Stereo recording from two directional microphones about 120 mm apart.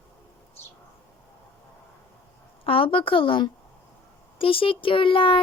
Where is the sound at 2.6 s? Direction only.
50° left (ahead or behind).